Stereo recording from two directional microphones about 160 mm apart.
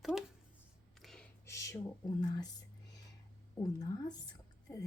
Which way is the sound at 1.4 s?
20° left (ahead or behind).